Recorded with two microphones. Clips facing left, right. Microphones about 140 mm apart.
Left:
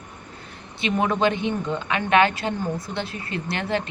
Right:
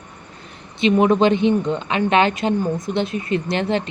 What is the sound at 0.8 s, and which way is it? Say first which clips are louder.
A woman's voice: right 7 dB; 20° right (ahead or behind).